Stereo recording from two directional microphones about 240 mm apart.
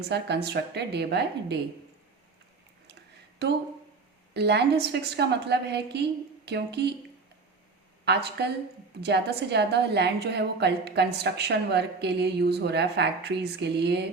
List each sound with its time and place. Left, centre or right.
0.1 s a woman's voice: right
4.4 s a woman's voice: right
8.0 s a woman's voice: right